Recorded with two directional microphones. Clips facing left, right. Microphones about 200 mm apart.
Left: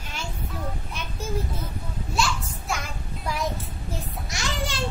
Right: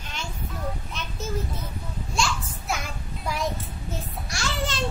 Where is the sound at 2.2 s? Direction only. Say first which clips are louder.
Left 1 dB; 5° left (ahead or behind).